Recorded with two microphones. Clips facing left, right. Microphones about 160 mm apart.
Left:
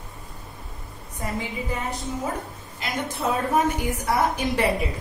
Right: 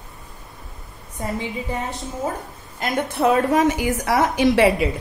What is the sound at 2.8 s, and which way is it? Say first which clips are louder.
A woman's voice: right 7 dB; 55° right (ahead or behind).